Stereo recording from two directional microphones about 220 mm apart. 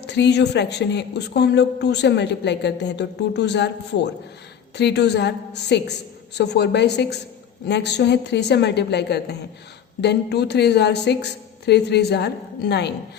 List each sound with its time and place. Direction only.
0.0 s speech: 50° left (ahead or behind)